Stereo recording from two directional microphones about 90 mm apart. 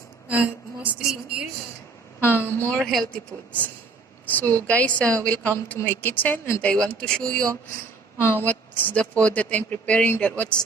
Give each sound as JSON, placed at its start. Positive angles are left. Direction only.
{"t": 0.3, "sound": "a sound", "side_deg": -15}
{"t": 2.2, "sound": "speech", "side_deg": 20}
{"t": 2.7, "sound": "speech", "side_deg": 5}
{"t": 4.3, "sound": "speech", "side_deg": 20}
{"t": 8.2, "sound": "speech", "side_deg": 25}